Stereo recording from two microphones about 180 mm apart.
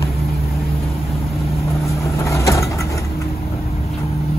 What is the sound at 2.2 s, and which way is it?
Vehicle, 15° left (ahead or behind).